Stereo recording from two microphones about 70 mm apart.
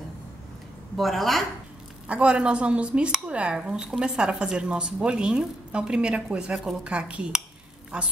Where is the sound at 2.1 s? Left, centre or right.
Centre.